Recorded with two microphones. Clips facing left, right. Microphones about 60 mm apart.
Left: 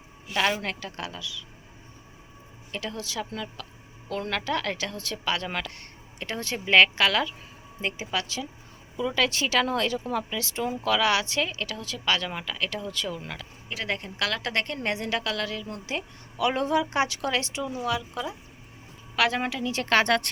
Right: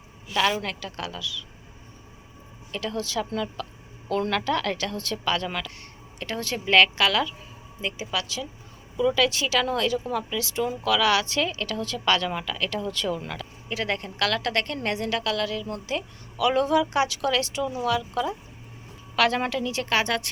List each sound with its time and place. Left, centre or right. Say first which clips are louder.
0.3 s a woman's voice: right 2 dB; left
2.7 s a woman's voice: right 4 dB; centre
5.4 s a woman's voice: right 1 dB; left
13.2 s a woman's voice: right 3 dB; centre
19.6 s speech: even; left
19.9 s speech: left 4 dB; left